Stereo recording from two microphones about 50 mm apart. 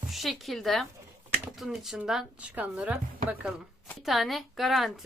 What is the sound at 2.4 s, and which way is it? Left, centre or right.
Speech, right.